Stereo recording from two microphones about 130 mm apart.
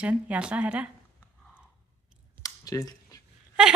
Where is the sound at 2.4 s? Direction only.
30° left (ahead or behind).